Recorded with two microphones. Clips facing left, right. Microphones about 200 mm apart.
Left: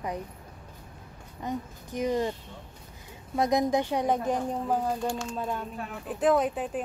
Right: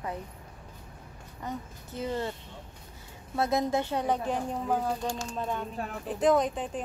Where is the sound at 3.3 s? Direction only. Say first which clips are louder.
Left 3 dB; 15° left (ahead or behind).